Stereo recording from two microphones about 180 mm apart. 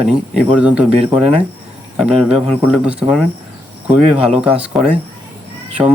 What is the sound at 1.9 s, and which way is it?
Speech, 5° right (ahead or behind).